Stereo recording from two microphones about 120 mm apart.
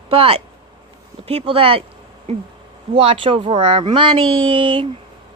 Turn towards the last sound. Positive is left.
turn(degrees=-45)  # may be behind; listen again after turning